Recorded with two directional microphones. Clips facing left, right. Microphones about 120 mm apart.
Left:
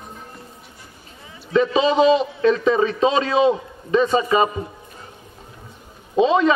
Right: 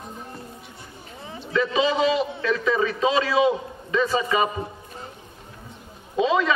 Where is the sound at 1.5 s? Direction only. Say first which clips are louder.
Left 5 dB; 25° left (ahead or behind).